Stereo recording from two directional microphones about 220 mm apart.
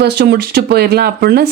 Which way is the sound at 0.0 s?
50° right (ahead or behind).